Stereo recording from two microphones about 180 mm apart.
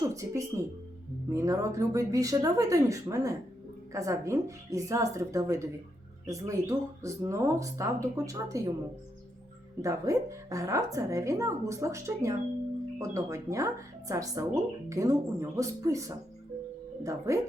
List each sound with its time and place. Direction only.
0.0 s a woman's voice: 15° right (ahead or behind)
9.8 s a woman's voice: 15° right (ahead or behind)